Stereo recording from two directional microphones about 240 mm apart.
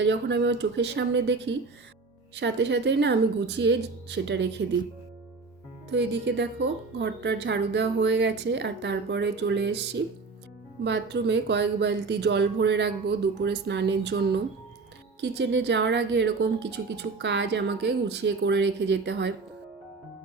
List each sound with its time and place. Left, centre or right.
0.0 s a woman's voice: right
5.9 s a woman's voice: right